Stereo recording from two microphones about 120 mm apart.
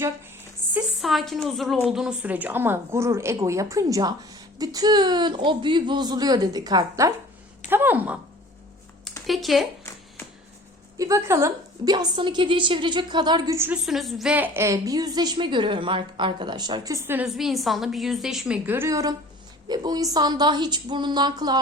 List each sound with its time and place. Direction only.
0.6 s a sound: 20° right (ahead or behind)
1.0 s a woman's voice: centre (ahead or behind); by 7.1 s 30° right (ahead or behind)
7.7 s a woman's voice: 15° right (ahead or behind)
9.2 s a woman's voice: centre (ahead or behind)
10.9 s a woman's voice: 25° right (ahead or behind)
13.8 s a woman's voice: centre (ahead or behind)
14.3 s a woman's voice: 15° right (ahead or behind)
17.2 s a woman's voice: centre (ahead or behind)
18.9 s a woman's voice: 25° right (ahead or behind)